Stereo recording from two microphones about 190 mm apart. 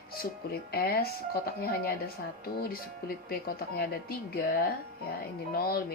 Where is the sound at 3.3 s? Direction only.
55° left (ahead or behind).